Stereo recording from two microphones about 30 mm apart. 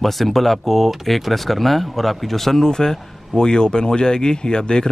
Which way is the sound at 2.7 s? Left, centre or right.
Left.